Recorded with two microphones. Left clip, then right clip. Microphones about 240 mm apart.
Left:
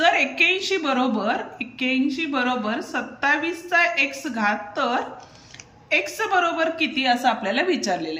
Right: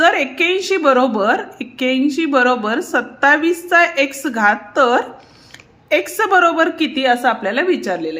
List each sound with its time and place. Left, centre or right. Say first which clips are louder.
0.0 s a woman's voice: right 4 dB; centre